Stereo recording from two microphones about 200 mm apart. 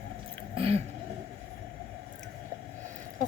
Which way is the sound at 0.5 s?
30° right (ahead or behind).